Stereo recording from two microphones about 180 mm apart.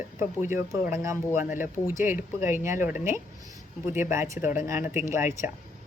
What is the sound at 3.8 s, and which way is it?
Speech, 45° left (ahead or behind).